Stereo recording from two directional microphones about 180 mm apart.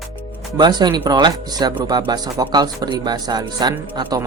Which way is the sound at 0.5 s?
25° right (ahead or behind).